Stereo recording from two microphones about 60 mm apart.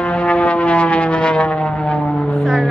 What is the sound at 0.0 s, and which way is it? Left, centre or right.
Vehicle, centre.